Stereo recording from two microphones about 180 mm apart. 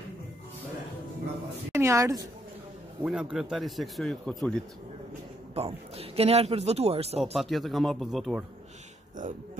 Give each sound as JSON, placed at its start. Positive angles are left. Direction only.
{"t": 1.7, "sound": "a woman's voice", "side_deg": -15}
{"t": 3.0, "sound": "speech", "side_deg": -5}
{"t": 5.5, "sound": "speech", "side_deg": -35}
{"t": 7.2, "sound": "speech", "side_deg": 0}